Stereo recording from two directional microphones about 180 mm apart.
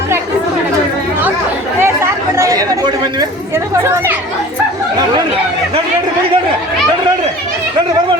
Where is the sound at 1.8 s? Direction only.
15° right (ahead or behind).